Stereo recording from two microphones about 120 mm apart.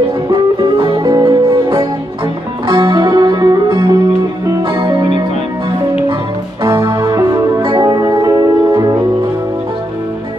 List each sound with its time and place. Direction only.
0.3 s music: 40° right (ahead or behind)
1.0 s music: 30° right (ahead or behind)
2.7 s music: 40° right (ahead or behind)
7.0 s music: 30° right (ahead or behind)